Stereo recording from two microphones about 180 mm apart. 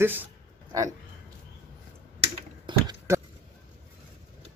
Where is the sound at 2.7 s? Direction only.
20° right (ahead or behind).